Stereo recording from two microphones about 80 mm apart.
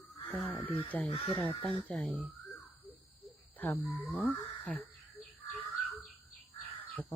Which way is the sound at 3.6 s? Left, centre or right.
Left.